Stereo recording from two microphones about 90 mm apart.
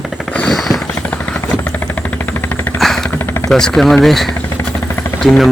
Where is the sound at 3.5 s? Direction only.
5° left (ahead or behind).